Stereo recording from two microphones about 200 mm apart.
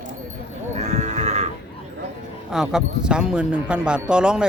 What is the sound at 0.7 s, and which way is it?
Livestock, 35° right (ahead or behind).